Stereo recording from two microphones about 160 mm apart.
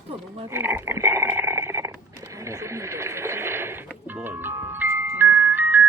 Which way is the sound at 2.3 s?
20° right (ahead or behind).